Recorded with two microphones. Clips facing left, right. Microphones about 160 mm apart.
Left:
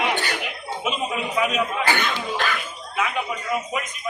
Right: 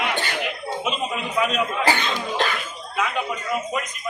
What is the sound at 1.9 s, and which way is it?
Speech, 25° right (ahead or behind).